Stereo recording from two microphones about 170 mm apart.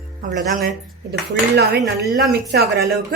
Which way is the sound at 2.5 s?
65° right (ahead or behind).